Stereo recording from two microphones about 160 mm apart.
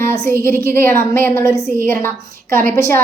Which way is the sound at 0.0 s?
15° left (ahead or behind).